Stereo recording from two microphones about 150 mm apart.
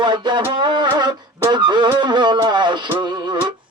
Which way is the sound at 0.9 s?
30° right (ahead or behind).